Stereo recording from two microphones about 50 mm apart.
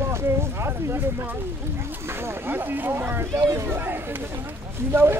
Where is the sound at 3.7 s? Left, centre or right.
Right.